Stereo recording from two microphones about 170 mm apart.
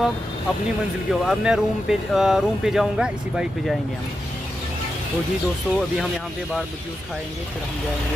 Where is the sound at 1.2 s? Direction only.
5° right (ahead or behind).